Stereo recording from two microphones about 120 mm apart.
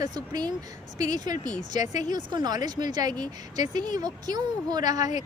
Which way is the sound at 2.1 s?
35° right (ahead or behind).